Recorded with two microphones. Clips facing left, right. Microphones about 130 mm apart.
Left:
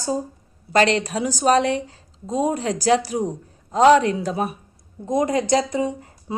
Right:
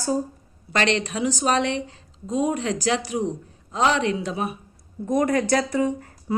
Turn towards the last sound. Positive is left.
turn(degrees=20)  # may be behind; listen again after turning